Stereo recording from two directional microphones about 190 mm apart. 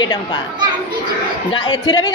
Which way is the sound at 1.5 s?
25° left (ahead or behind).